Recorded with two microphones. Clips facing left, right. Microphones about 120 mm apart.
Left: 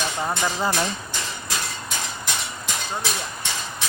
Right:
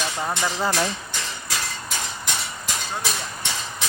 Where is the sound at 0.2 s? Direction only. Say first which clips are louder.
Even; 15° left (ahead or behind).